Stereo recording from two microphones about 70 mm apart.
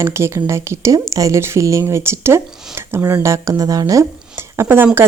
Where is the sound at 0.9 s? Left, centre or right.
Right.